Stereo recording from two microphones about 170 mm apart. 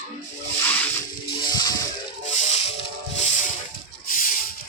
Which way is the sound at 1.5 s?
25° left (ahead or behind).